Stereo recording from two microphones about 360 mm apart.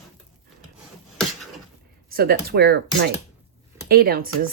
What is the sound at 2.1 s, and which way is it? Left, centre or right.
Speech, right.